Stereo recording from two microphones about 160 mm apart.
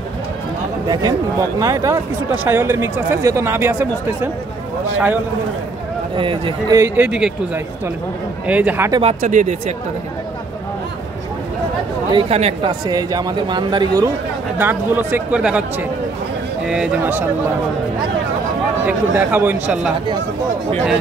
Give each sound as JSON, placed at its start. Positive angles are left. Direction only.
{"t": 1.6, "sound": "speech", "side_deg": -20}
{"t": 6.1, "sound": "speech", "side_deg": -30}
{"t": 6.8, "sound": "speech", "side_deg": -5}
{"t": 9.0, "sound": "speech", "side_deg": -50}
{"t": 12.1, "sound": "speech", "side_deg": -35}
{"t": 12.8, "sound": "speech", "side_deg": -25}
{"t": 14.6, "sound": "speech", "side_deg": -10}
{"t": 16.6, "sound": "speech", "side_deg": -5}
{"t": 18.9, "sound": "speech", "side_deg": -10}